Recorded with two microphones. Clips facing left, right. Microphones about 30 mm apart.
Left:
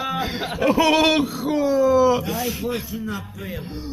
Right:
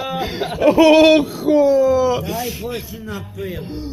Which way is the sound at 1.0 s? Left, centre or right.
Right.